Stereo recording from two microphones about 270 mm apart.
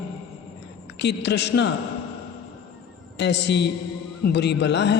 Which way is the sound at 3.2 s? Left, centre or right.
Left.